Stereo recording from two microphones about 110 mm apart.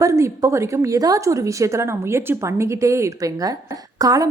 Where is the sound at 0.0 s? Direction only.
30° right (ahead or behind).